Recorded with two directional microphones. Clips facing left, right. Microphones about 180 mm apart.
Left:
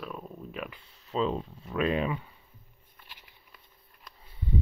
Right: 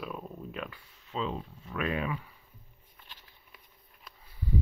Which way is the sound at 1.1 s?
35° left (ahead or behind).